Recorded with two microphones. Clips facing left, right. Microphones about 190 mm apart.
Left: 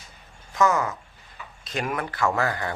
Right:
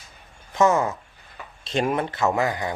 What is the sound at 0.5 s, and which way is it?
Speech, 25° right (ahead or behind).